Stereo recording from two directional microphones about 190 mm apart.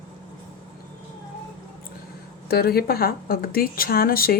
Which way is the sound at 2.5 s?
55° left (ahead or behind).